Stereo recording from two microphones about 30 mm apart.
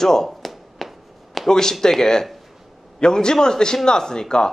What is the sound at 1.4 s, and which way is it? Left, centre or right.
A man's voice, centre.